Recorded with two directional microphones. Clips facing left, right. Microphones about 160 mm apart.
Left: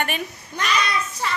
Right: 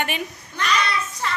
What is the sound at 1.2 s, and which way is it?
Music, 5° left (ahead or behind).